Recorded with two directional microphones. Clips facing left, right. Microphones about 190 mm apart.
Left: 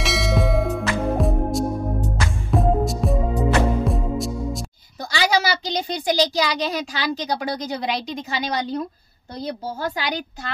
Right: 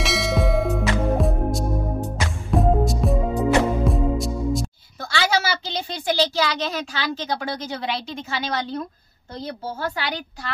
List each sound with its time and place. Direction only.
0.0 s music: centre (ahead or behind)
5.1 s a woman's voice: 15° left (ahead or behind)